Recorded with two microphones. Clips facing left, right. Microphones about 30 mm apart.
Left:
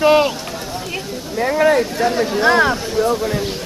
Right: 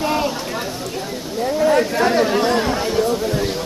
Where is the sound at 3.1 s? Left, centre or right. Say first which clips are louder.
Left 1 dB; centre.